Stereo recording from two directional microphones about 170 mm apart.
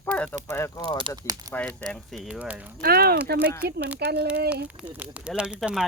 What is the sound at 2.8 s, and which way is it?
Speech, 65° right (ahead or behind).